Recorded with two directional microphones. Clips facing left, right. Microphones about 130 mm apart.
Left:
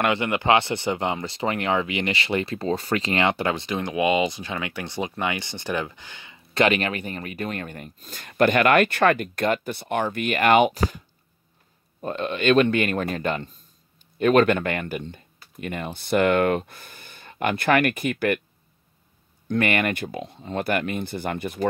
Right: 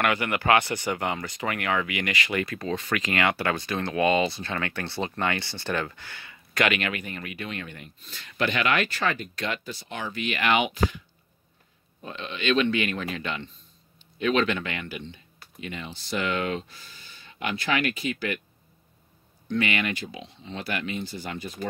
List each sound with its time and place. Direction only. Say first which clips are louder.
0.0 s speech: left 3 dB; 25° left (ahead or behind); by 11.0 s 40° left (ahead or behind)
12.0 s speech: left 8 dB; 45° left (ahead or behind)
19.4 s speech: left 4 dB; 50° left (ahead or behind)